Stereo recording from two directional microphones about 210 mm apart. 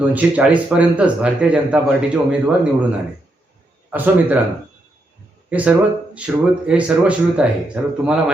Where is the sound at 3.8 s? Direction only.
10° right (ahead or behind).